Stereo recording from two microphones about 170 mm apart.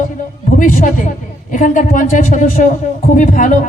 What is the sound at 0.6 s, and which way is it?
Speech, 50° left (ahead or behind).